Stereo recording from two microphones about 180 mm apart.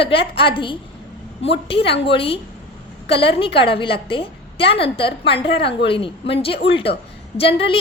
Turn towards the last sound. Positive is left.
turn(degrees=30)  # may be behind; listen again after turning